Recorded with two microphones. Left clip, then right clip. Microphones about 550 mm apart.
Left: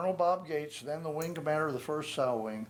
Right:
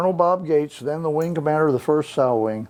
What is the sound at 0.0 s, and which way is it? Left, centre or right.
Speech, right.